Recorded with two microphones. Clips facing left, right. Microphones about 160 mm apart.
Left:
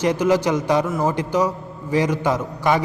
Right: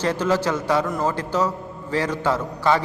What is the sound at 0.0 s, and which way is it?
A man's voice, 15° left (ahead or behind).